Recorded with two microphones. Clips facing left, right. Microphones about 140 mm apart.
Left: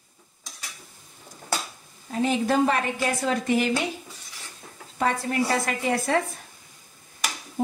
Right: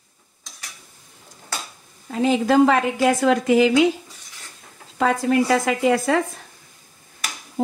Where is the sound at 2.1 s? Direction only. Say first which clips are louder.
Right 5 dB; 90° right.